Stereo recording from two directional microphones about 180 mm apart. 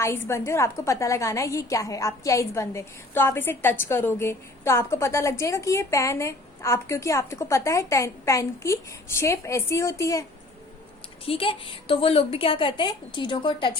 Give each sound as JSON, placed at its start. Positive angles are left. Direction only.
{"t": 0.0, "sound": "a woman's voice", "side_deg": 15}
{"t": 11.3, "sound": "a woman's voice", "side_deg": 30}